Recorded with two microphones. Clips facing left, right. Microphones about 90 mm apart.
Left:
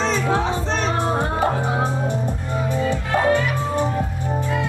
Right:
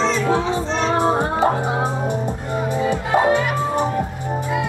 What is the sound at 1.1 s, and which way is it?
Music, 20° right (ahead or behind).